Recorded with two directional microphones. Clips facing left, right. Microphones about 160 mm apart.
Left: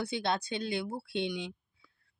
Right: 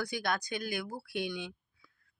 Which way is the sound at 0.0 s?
25° left (ahead or behind).